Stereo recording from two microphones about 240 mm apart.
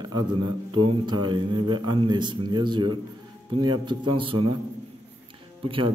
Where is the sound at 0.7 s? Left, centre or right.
Centre.